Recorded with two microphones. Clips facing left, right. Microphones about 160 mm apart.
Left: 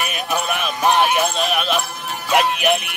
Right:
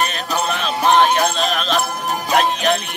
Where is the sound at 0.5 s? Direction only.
10° left (ahead or behind).